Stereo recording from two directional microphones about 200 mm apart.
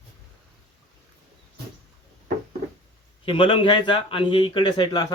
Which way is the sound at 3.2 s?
25° left (ahead or behind).